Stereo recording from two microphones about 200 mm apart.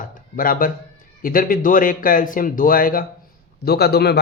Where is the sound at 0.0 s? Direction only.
45° left (ahead or behind).